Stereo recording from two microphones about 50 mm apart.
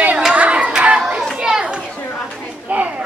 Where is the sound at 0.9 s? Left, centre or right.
Centre.